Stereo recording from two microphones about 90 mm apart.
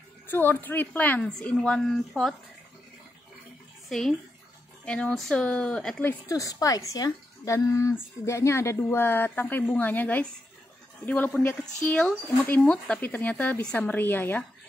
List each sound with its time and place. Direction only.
0.3 s a woman's voice: 20° left (ahead or behind)
4.8 s speech: 10° left (ahead or behind)
6.2 s a woman's voice: 40° left (ahead or behind); by 14.4 s 20° left (ahead or behind)